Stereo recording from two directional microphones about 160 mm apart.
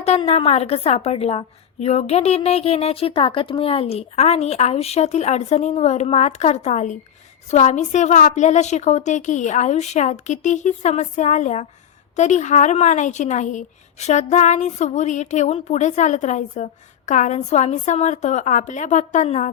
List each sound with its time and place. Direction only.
0.0 s a woman's voice: 40° left (ahead or behind)